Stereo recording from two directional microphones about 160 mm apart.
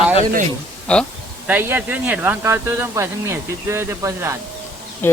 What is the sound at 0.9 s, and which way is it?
Speech, 5° left (ahead or behind).